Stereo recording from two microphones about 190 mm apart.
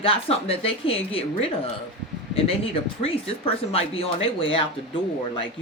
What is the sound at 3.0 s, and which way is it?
Speech, 30° left (ahead or behind).